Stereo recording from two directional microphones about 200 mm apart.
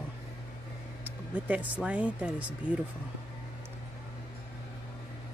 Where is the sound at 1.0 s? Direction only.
10° right (ahead or behind).